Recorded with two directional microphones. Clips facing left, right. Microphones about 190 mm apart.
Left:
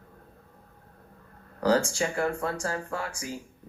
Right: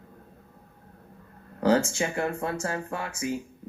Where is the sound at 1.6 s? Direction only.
25° right (ahead or behind).